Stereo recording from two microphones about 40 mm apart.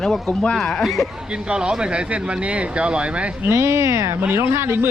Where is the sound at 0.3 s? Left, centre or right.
Left.